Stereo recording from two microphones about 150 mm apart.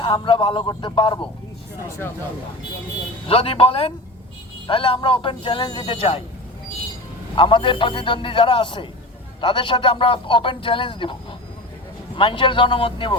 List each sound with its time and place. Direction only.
0.0 s speech: 35° left (ahead or behind)
3.2 s speech: 40° left (ahead or behind)
7.3 s speech: 35° left (ahead or behind)